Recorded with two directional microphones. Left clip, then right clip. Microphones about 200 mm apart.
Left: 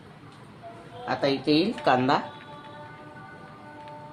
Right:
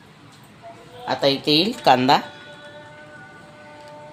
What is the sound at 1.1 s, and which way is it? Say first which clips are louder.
Speech: right 5 dB; 55° right (ahead or behind).